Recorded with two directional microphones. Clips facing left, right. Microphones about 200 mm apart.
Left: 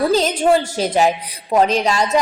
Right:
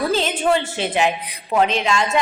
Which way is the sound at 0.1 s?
40° left (ahead or behind).